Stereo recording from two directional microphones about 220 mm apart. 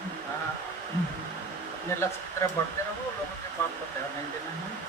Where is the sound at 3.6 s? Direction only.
10° left (ahead or behind).